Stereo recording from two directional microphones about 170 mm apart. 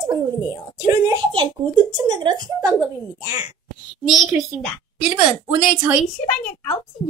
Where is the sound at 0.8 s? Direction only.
20° right (ahead or behind).